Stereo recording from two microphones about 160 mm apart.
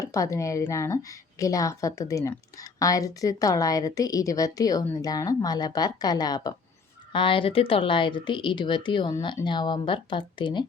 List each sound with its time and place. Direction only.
0.0 s a woman's voice: 20° left (ahead or behind)